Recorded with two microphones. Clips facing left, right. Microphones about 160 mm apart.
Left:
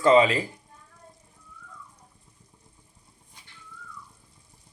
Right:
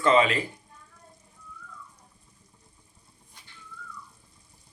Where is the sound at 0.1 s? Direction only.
30° left (ahead or behind).